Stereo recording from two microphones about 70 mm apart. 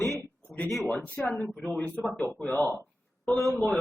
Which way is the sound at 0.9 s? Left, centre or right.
Left.